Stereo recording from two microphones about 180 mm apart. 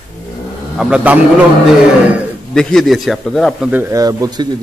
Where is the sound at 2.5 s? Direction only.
5° left (ahead or behind).